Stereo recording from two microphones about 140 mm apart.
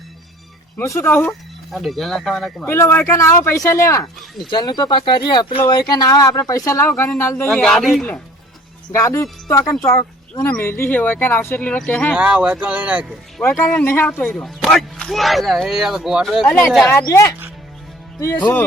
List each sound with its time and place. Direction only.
0.8 s speech: 20° left (ahead or behind)
1.3 s speech: centre (ahead or behind)
2.6 s speech: 20° left (ahead or behind)
4.4 s speech: 35° left (ahead or behind); by 7.6 s 15° left (ahead or behind)
7.6 s speech: 5° left (ahead or behind)
8.9 s speech: 20° left (ahead or behind)
12.1 s speech: 10° right (ahead or behind)
13.4 s speech: 15° left (ahead or behind); by 16.6 s centre (ahead or behind)
17.0 s speech: 25° left (ahead or behind)